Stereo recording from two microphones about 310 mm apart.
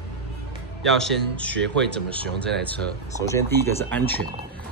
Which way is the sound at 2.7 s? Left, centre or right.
Centre.